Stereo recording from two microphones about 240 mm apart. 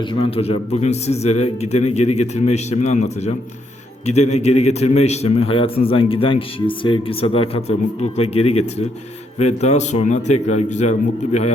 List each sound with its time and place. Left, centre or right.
0.0 s a man's voice: left